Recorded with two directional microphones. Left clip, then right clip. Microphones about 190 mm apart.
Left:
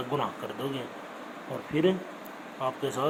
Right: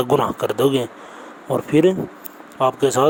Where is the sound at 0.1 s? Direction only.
60° right (ahead or behind).